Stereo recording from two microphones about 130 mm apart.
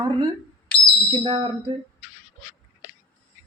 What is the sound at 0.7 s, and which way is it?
Bird, 10° left (ahead or behind).